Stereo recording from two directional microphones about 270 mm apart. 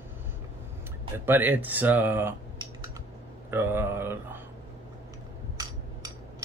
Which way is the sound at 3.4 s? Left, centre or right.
Centre.